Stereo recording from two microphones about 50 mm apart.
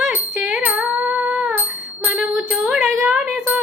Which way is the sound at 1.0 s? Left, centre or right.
Right.